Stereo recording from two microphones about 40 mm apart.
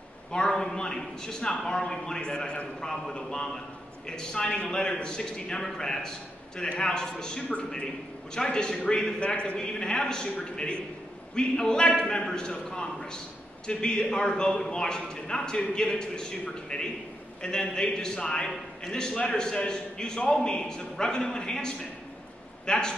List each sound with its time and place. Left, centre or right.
0.5 s a man's voice: centre
9.2 s a man's voice: left